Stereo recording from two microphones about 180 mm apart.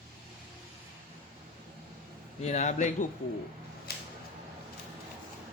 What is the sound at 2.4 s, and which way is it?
Speech, 40° left (ahead or behind).